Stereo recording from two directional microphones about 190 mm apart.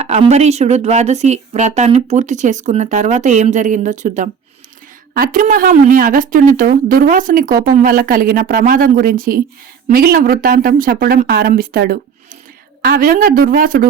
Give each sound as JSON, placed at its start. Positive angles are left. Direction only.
{"t": 0.0, "sound": "a woman's voice", "side_deg": -35}